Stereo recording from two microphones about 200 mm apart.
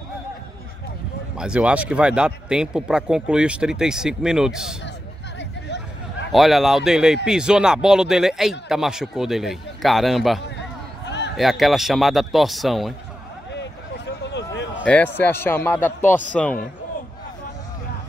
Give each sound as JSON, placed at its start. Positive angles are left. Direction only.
{"t": 1.3, "sound": "a man's voice", "side_deg": -5}
{"t": 6.3, "sound": "a man's voice", "side_deg": 0}
{"t": 11.1, "sound": "a sound", "side_deg": 60}
{"t": 11.3, "sound": "a man's voice", "side_deg": 0}
{"t": 13.5, "sound": "a sound", "side_deg": 60}
{"t": 14.8, "sound": "a man's voice", "side_deg": 10}